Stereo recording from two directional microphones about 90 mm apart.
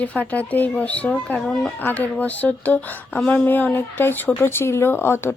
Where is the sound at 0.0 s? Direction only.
15° left (ahead or behind).